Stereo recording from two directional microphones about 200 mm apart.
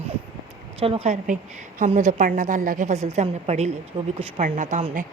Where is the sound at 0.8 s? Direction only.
30° right (ahead or behind).